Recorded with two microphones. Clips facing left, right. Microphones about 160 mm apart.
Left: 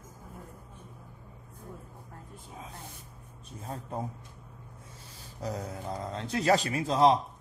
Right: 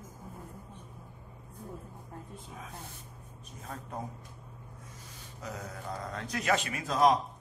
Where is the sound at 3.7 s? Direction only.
30° left (ahead or behind).